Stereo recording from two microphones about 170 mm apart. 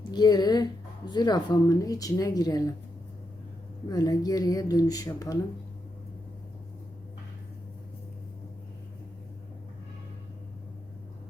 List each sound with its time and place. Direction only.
0.1 s speech: 25° left (ahead or behind)
3.8 s speech: 20° left (ahead or behind)